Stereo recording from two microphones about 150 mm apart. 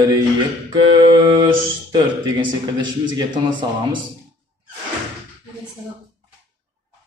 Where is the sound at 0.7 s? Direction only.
30° right (ahead or behind).